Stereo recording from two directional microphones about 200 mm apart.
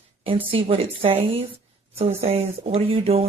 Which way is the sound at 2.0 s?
30° right (ahead or behind).